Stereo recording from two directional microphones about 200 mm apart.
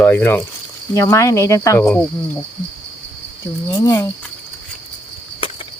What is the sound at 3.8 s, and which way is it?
Speech, 15° left (ahead or behind).